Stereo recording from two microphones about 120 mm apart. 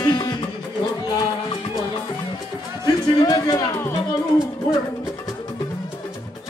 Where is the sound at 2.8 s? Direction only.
35° left (ahead or behind).